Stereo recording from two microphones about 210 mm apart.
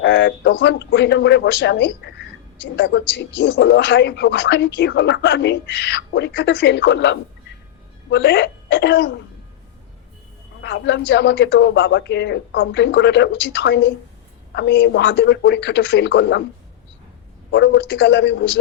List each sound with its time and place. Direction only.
0.0 s speech: 60° left (ahead or behind)
10.6 s speech: 55° left (ahead or behind)
17.5 s speech: 60° left (ahead or behind)